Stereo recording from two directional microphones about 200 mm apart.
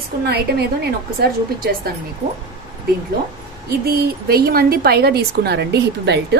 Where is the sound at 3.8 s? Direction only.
50° right (ahead or behind).